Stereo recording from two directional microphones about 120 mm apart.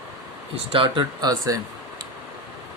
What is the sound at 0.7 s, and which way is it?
Speech, 45° right (ahead or behind).